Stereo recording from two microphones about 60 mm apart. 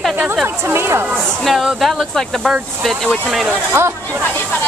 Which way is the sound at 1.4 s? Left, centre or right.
Centre.